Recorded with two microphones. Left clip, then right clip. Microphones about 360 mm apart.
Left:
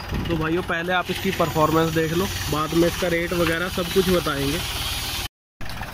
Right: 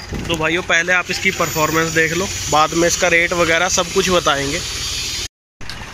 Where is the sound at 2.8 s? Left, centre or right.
Right.